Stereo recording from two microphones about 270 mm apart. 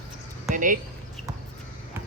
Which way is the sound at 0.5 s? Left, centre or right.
Right.